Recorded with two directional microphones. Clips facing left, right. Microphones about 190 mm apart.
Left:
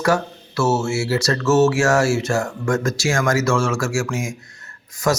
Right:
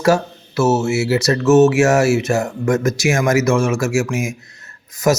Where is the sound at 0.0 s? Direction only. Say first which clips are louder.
Right 4 dB; 20° right (ahead or behind).